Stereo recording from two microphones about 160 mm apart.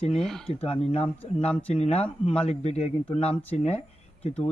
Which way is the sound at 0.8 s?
40° left (ahead or behind).